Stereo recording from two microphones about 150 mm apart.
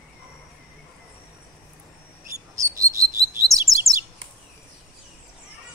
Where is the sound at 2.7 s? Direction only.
20° right (ahead or behind).